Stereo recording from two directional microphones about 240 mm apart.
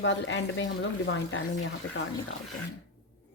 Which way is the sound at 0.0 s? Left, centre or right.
Left.